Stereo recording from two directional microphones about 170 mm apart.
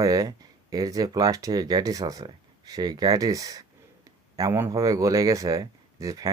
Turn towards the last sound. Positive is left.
turn(degrees=-20)  # may be behind; listen again after turning